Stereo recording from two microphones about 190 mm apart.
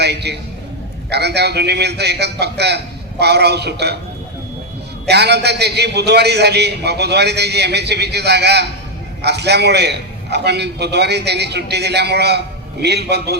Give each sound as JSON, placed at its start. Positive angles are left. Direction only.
{"t": 0.0, "sound": "a man's voice", "side_deg": -60}
{"t": 5.0, "sound": "a man's voice", "side_deg": -60}